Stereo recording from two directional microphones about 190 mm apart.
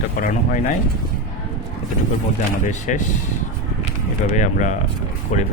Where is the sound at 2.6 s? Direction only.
40° left (ahead or behind).